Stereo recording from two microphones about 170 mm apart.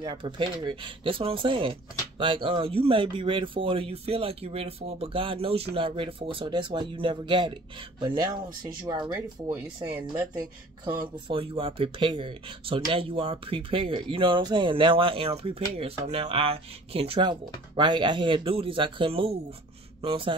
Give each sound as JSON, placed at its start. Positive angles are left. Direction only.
{"t": 0.0, "sound": "speech", "side_deg": -30}
{"t": 11.2, "sound": "speech", "side_deg": -30}